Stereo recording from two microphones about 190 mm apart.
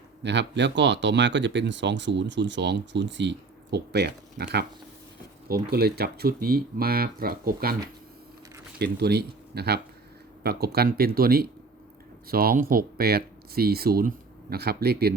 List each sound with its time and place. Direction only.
0.2 s speech: 65° right (ahead or behind)
5.7 s speech: 55° right (ahead or behind)
8.8 s speech: 60° right (ahead or behind)